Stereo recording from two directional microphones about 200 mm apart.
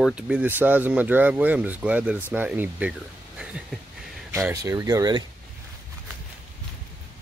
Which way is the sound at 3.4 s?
5° right (ahead or behind).